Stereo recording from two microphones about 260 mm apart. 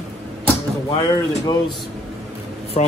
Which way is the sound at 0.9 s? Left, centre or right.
Centre.